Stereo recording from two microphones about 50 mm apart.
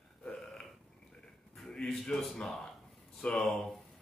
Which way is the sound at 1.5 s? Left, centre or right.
Centre.